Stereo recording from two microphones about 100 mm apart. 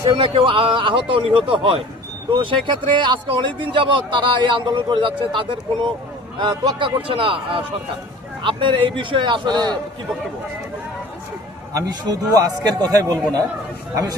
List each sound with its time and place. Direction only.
0.0 s speech: 55° right (ahead or behind)
11.7 s a man's voice: 40° right (ahead or behind)